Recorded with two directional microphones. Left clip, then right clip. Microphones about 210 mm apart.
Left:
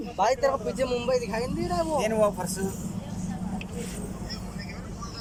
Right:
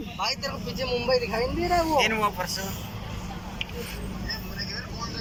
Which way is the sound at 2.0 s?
30° left (ahead or behind).